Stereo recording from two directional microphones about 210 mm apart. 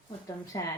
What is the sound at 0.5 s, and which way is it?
Speech, 15° left (ahead or behind).